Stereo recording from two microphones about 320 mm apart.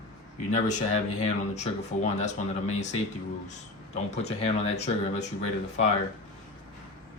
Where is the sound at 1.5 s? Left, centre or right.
Left.